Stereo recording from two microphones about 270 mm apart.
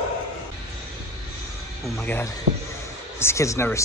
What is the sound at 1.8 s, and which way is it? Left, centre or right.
Speech, centre.